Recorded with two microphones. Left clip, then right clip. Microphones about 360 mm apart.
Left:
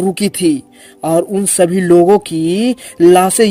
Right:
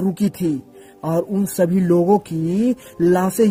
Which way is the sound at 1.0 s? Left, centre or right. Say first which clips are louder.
Left 8 dB; right.